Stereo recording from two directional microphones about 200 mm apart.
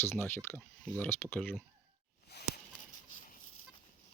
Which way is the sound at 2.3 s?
55° left (ahead or behind).